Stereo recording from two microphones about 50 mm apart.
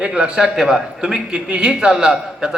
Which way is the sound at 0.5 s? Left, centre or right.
Centre.